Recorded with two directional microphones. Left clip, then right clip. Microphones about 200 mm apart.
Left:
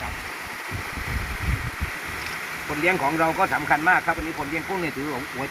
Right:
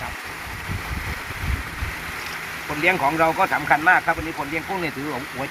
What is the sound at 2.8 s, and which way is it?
Speech, 10° right (ahead or behind).